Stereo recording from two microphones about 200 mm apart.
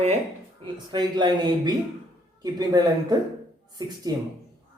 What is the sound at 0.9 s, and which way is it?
Speech, 20° right (ahead or behind).